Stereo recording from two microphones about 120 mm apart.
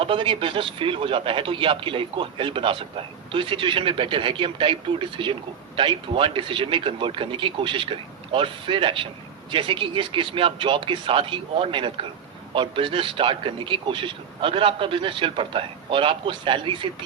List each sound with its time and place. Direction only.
0.0 s speech: 45° right (ahead or behind)